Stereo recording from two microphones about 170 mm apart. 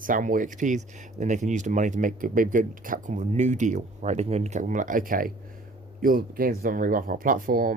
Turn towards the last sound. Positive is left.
turn(degrees=-55)  # may be behind; listen again after turning